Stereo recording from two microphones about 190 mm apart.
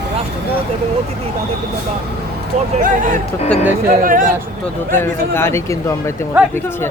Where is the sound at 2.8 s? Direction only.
45° right (ahead or behind).